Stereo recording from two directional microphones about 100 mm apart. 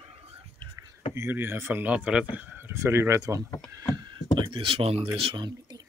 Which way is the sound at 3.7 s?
40° right (ahead or behind).